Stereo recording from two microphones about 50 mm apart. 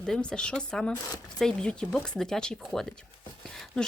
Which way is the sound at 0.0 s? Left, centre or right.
Centre.